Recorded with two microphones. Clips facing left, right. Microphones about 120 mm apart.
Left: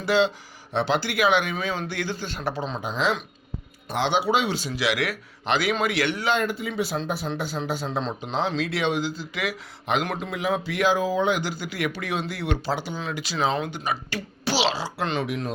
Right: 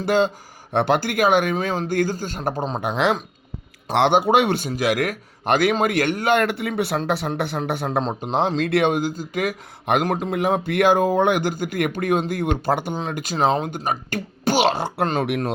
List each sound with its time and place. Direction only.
0.0 s speech: 50° right (ahead or behind)
2.8 s speech: 60° right (ahead or behind)
15.3 s speech: 65° right (ahead or behind)